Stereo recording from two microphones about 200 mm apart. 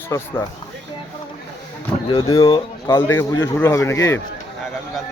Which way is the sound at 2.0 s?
20° left (ahead or behind).